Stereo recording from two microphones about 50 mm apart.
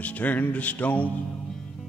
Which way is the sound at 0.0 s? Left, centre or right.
Left.